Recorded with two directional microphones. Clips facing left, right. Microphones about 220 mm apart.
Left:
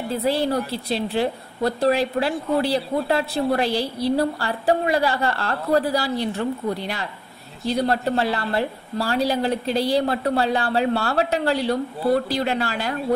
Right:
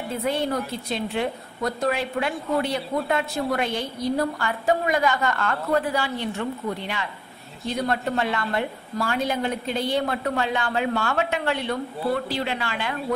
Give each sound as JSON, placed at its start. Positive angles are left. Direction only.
{"t": 0.1, "sound": "a woman's voice", "side_deg": 35}